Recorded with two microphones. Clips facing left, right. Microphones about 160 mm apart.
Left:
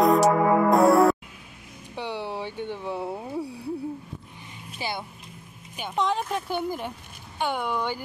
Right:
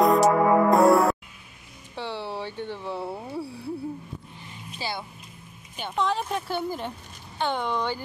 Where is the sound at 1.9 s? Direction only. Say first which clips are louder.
Left 1 dB; 15° left (ahead or behind).